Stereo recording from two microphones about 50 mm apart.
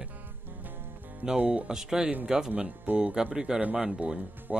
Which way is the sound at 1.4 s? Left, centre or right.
Right.